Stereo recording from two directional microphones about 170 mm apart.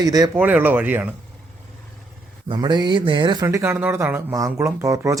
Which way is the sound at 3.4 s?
15° right (ahead or behind).